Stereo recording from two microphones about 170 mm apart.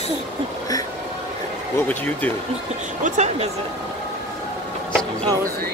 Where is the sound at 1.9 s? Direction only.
10° left (ahead or behind).